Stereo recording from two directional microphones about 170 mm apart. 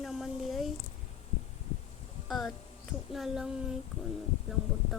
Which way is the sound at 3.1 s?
Centre (ahead or behind).